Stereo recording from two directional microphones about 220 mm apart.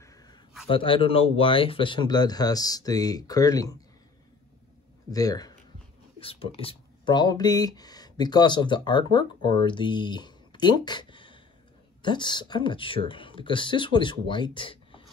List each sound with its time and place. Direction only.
0.0 s a sound: 15° left (ahead or behind)
0.7 s speech: 25° left (ahead or behind)
5.1 s speech: 15° left (ahead or behind)